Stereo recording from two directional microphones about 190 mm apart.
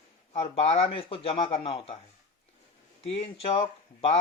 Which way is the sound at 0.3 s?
30° left (ahead or behind).